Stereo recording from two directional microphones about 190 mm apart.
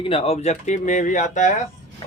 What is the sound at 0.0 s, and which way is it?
Speech, 30° left (ahead or behind).